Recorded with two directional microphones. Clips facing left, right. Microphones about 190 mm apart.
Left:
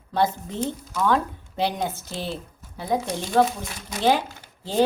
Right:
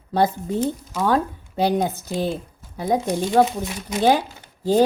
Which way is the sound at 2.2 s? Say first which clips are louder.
Right 6 dB; 45° right (ahead or behind).